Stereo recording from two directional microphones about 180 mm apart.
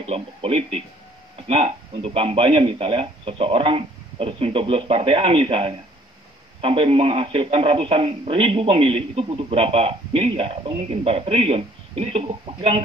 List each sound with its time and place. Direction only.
0.0 s speech: 35° right (ahead or behind)